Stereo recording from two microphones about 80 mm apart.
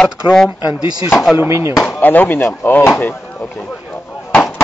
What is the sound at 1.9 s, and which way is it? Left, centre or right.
Speech, left.